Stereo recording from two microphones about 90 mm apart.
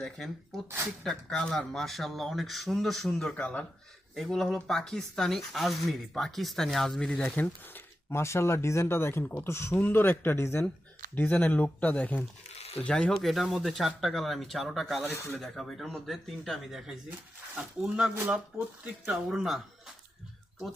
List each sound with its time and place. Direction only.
0.0 s speech: 5° left (ahead or behind)
4.1 s speech: 5° left (ahead or behind)
7.2 s speech: 20° left (ahead or behind)
11.1 s speech: 20° left (ahead or behind); by 19.6 s 5° right (ahead or behind)